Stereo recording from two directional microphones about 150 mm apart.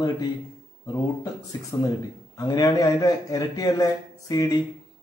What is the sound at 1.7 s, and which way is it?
A man's voice, 20° left (ahead or behind).